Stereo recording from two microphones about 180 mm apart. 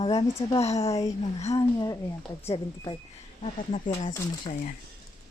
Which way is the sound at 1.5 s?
20° left (ahead or behind).